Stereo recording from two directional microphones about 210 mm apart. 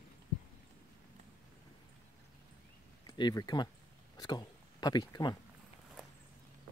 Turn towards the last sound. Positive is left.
turn(degrees=20)  # may be behind; listen again after turning